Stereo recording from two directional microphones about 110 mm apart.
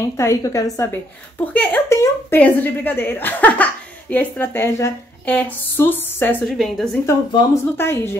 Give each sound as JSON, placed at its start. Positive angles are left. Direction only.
{"t": 0.0, "sound": "a woman's voice", "side_deg": 30}
{"t": 1.4, "sound": "a woman's voice", "side_deg": 15}
{"t": 1.9, "sound": "a woman's voice", "side_deg": 25}
{"t": 5.2, "sound": "a woman's voice", "side_deg": 15}
{"t": 6.4, "sound": "a woman's voice", "side_deg": 0}
{"t": 7.6, "sound": "a woman's voice", "side_deg": 20}